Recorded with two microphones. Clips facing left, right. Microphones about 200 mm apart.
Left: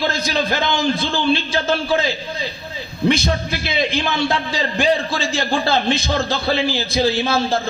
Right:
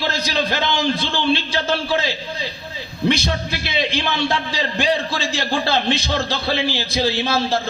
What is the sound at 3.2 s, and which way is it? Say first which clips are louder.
A man's voice: left 3 dB; 45° left (ahead or behind).